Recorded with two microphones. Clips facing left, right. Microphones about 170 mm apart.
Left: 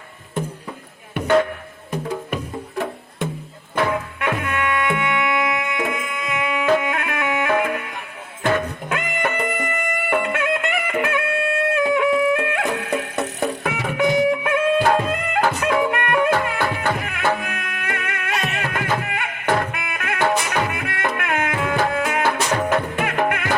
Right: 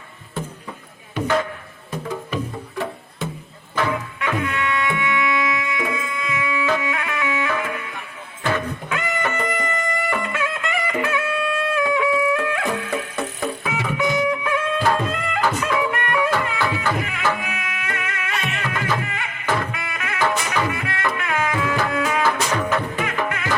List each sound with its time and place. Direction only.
2.3 s music: 55° left (ahead or behind)